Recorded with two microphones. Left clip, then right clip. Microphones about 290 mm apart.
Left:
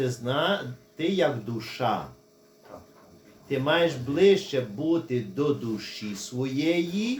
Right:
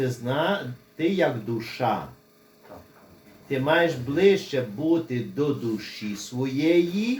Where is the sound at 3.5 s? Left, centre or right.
Centre.